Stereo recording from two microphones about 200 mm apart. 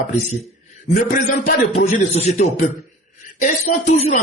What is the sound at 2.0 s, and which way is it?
Speech, 35° left (ahead or behind).